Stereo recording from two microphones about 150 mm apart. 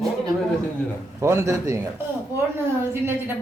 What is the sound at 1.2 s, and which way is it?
Speech, 20° right (ahead or behind).